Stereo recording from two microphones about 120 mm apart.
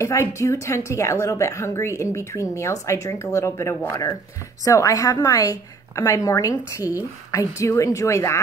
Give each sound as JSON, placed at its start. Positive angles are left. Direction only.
{"t": 0.0, "sound": "a woman's voice", "side_deg": 25}